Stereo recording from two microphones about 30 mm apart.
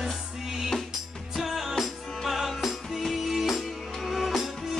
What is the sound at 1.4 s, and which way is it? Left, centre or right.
Music, centre.